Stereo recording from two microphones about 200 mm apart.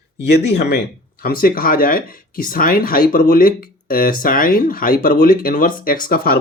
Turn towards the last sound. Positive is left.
turn(degrees=45)  # may be behind; listen again after turning